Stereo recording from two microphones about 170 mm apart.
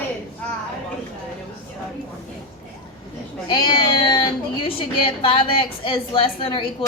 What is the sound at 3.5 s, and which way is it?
A woman's voice, 30° left (ahead or behind).